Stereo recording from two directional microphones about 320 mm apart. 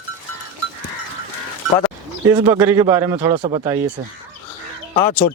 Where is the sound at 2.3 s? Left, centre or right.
Centre.